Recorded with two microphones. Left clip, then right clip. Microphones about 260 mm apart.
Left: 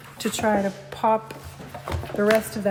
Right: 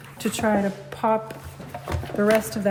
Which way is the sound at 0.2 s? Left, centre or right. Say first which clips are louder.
Even; centre.